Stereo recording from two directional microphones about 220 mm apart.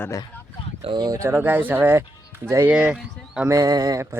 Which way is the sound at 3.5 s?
15° right (ahead or behind).